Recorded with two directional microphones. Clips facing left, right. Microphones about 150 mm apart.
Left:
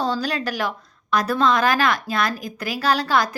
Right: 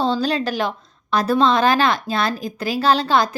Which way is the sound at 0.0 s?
25° right (ahead or behind).